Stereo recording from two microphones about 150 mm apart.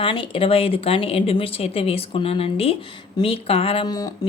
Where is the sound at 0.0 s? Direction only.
35° left (ahead or behind).